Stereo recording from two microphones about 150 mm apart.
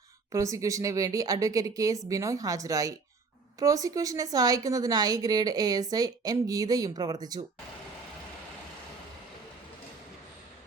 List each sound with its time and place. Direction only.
0.3 s a woman's voice: 20° right (ahead or behind)